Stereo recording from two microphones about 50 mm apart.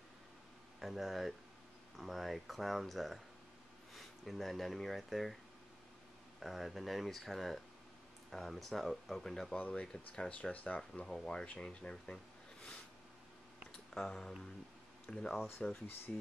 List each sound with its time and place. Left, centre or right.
0.7 s speech: centre
6.4 s speech: centre
9.6 s speech: left
11.1 s speech: centre
13.7 s a sound: centre
15.0 s speech: centre